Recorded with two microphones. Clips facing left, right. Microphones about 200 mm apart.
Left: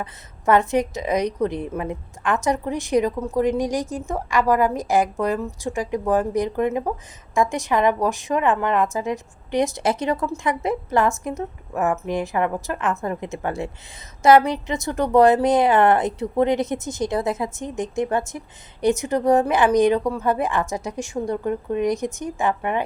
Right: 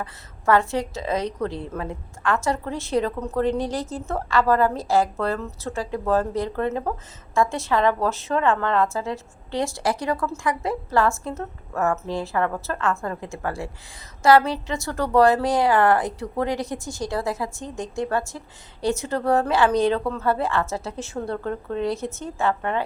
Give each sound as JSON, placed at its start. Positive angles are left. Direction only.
{"t": 0.0, "sound": "a woman's voice", "side_deg": 20}